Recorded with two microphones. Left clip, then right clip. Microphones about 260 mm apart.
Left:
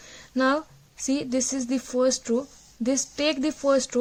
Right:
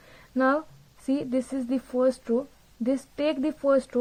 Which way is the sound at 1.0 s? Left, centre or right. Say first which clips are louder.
Left 2 dB; left.